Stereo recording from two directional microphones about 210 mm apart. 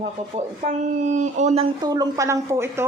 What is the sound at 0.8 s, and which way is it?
Speech, 35° right (ahead or behind).